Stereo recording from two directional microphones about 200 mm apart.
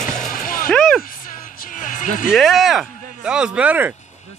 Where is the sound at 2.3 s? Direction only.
Centre (ahead or behind).